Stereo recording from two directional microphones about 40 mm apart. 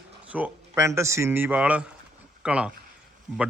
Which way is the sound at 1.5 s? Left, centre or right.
Right.